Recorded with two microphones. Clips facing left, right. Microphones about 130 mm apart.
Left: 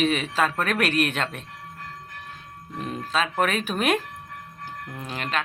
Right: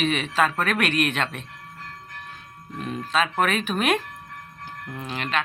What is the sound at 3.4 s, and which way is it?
Speech, 40° left (ahead or behind).